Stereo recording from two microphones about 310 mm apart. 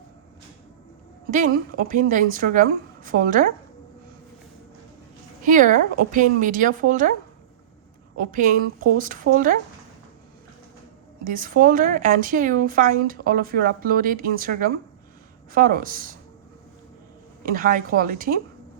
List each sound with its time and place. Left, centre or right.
1.3 s speech: right
5.4 s speech: right
8.2 s speech: right
11.2 s speech: right
17.4 s speech: right